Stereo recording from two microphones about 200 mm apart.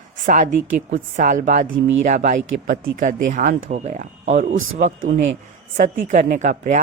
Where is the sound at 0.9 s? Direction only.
35° right (ahead or behind).